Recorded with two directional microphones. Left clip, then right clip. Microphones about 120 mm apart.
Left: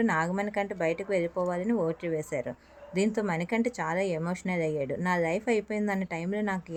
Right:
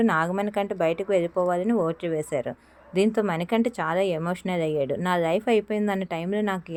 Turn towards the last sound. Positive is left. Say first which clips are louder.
# right 5 dB
turn(degrees=-25)  # may be behind; listen again after turning